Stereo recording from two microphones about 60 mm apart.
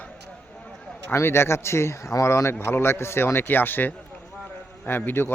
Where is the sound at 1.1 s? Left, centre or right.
Left.